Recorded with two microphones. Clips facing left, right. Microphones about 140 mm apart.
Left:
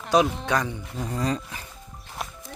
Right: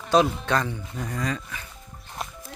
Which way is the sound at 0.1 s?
15° left (ahead or behind).